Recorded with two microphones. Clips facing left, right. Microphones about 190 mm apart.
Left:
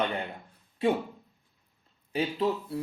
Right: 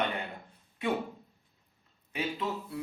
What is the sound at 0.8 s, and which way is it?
Speech, 30° left (ahead or behind).